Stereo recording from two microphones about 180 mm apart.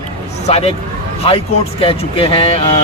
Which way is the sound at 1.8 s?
30° left (ahead or behind).